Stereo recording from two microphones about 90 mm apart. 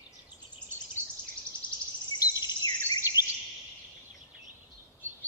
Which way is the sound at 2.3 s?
50° left (ahead or behind).